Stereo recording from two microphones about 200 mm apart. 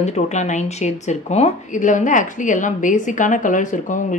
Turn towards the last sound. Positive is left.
turn(degrees=40)  # may be behind; listen again after turning